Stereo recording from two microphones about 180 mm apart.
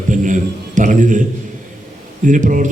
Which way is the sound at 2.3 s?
45° right (ahead or behind).